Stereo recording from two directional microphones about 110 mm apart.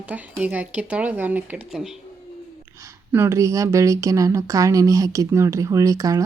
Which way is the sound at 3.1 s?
25° right (ahead or behind).